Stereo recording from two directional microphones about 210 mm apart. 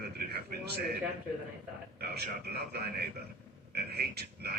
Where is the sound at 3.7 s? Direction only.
50° right (ahead or behind).